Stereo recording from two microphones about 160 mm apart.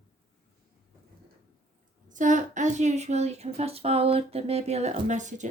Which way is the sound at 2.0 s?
50° right (ahead or behind).